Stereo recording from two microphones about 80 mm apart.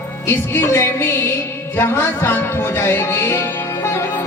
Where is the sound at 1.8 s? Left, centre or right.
Left.